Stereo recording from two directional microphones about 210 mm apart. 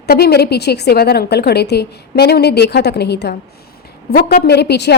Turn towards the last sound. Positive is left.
turn(degrees=50)  # may be behind; listen again after turning